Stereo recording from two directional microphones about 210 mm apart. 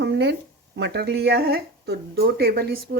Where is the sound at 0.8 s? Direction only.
55° right (ahead or behind).